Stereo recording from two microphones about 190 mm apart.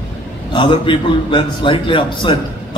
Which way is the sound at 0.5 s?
25° left (ahead or behind).